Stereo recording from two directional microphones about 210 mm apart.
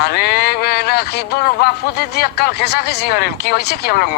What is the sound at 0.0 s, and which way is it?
Speech, 50° left (ahead or behind).